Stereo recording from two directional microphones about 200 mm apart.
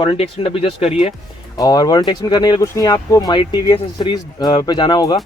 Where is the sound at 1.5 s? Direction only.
20° left (ahead or behind).